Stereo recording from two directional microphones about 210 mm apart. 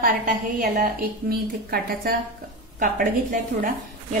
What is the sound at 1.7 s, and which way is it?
A woman's voice, 45° right (ahead or behind).